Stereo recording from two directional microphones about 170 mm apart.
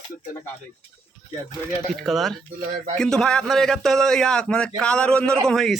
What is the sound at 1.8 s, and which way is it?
A man's voice, centre (ahead or behind).